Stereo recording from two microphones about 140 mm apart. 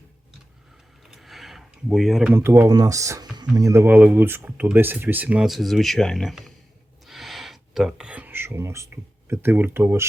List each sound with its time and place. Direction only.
1.0 s a sound: centre (ahead or behind)
2.3 s speech: 15° right (ahead or behind)
2.6 s speech: 25° right (ahead or behind)